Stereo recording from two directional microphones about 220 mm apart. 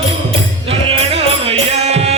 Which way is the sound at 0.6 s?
25° right (ahead or behind).